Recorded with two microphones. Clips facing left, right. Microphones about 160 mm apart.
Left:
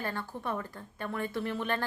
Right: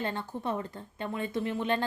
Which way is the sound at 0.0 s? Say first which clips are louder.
Right 3 dB; 20° right (ahead or behind).